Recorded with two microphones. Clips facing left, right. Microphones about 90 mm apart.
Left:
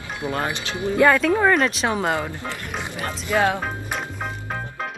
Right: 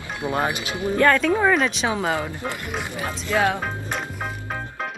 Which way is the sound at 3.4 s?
Centre (ahead or behind).